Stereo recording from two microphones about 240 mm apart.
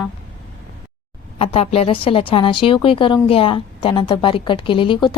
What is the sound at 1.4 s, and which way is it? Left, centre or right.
A woman's voice, left.